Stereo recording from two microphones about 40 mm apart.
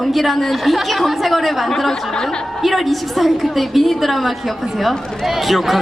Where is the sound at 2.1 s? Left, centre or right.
Centre.